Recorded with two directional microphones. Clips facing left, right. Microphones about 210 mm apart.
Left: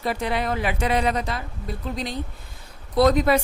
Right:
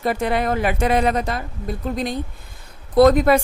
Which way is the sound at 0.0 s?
50° right (ahead or behind).